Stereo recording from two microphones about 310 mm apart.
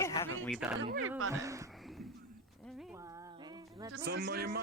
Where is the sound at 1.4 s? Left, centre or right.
Centre.